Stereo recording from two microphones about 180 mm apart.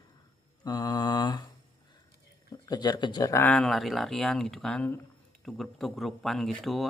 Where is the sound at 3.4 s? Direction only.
5° left (ahead or behind).